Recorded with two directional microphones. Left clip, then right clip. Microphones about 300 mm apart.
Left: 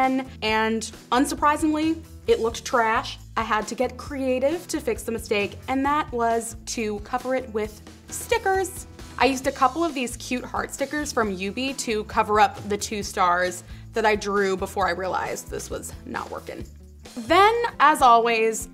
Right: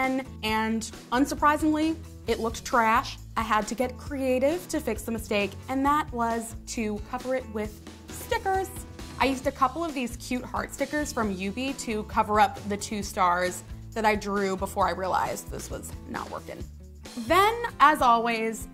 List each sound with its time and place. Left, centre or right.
0.0 s a woman's voice: right
17.3 s a woman's voice: right